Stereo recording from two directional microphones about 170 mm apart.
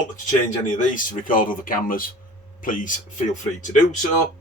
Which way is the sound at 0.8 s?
50° left (ahead or behind).